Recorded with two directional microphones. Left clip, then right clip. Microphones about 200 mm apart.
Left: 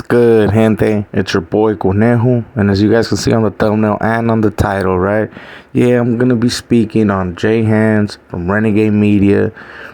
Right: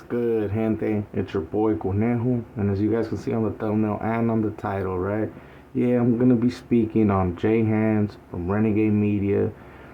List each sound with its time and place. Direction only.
0.1 s speech: 60° left (ahead or behind)
5.7 s speech: 50° left (ahead or behind)